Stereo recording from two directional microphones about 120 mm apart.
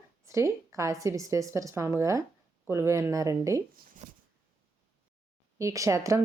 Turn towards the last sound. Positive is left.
turn(degrees=-25)  # may be behind; listen again after turning